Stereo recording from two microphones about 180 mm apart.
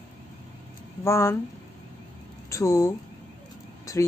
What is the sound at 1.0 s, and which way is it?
Speech, 15° left (ahead or behind).